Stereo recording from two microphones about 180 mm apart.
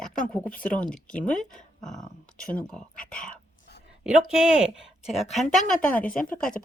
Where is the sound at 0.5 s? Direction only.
50° left (ahead or behind).